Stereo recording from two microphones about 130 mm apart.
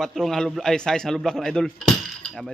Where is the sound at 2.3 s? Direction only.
5° left (ahead or behind).